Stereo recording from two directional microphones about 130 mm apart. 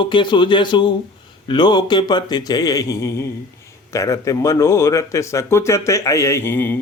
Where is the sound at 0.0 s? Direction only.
35° left (ahead or behind).